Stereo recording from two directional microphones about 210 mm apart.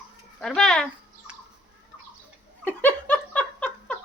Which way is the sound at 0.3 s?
Centre (ahead or behind).